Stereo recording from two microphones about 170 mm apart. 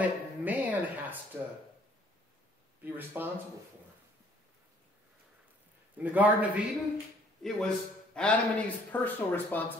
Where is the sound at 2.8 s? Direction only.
10° right (ahead or behind).